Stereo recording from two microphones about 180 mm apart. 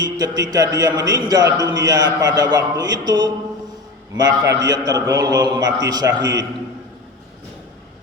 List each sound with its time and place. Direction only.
0.0 s a man's voice: 20° right (ahead or behind)